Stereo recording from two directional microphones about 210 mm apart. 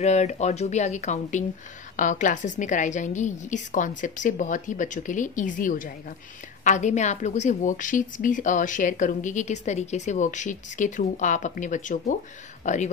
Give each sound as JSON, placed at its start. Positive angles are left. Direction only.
{"t": 0.0, "sound": "a woman's voice", "side_deg": 30}